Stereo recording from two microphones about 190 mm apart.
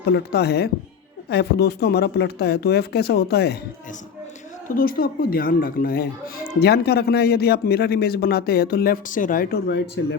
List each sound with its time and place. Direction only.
0.0 s speech: 60° left (ahead or behind)
4.7 s speech: 50° left (ahead or behind)